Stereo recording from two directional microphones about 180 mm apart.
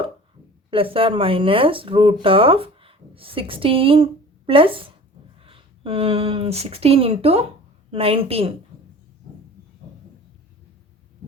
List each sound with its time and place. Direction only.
0.7 s a woman's voice: 30° right (ahead or behind)